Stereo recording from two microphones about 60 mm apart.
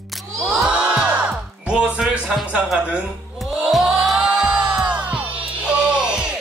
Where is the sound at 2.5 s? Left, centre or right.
Centre.